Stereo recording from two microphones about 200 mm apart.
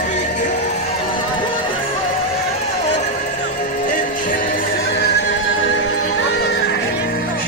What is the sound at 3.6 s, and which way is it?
Music, 40° left (ahead or behind).